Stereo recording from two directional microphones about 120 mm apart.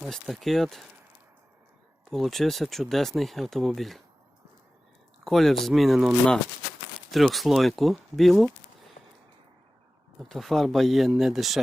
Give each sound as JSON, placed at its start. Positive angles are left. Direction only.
{"t": 0.0, "sound": "speech", "side_deg": 0}
{"t": 2.0, "sound": "speech", "side_deg": 0}
{"t": 5.2, "sound": "speech", "side_deg": 0}
{"t": 9.0, "sound": "a sound", "side_deg": 90}
{"t": 10.2, "sound": "speech", "side_deg": 0}